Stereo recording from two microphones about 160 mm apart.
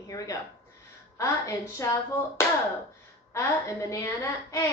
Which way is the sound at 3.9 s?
20° left (ahead or behind).